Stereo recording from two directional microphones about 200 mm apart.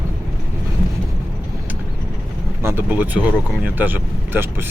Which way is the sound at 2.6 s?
10° right (ahead or behind).